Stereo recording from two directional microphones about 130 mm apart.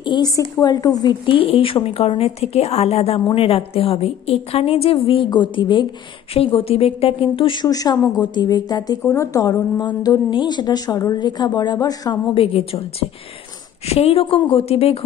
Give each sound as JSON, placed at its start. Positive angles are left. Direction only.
{"t": 0.0, "sound": "a woman's voice", "side_deg": 35}
{"t": 12.4, "sound": "a woman's voice", "side_deg": 50}
{"t": 13.8, "sound": "a woman's voice", "side_deg": 50}